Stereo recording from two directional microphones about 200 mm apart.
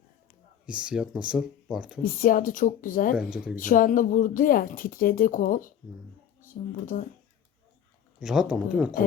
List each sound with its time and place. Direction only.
0.6 s speech: 5° right (ahead or behind)
2.2 s speech: 45° left (ahead or behind)
3.2 s speech: 5° right (ahead or behind)
3.5 s speech: 40° left (ahead or behind)
8.2 s speech: 5° right (ahead or behind)